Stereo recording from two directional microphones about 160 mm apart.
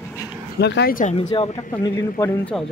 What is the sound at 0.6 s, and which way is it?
Speech, 85° left.